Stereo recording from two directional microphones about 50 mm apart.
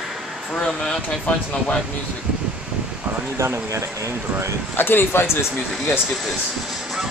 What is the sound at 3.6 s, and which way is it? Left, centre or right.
Speech, right.